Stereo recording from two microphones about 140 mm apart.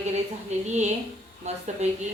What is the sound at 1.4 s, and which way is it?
Speech, 55° right (ahead or behind).